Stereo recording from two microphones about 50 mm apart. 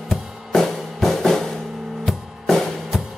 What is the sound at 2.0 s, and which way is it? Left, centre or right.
Music, centre.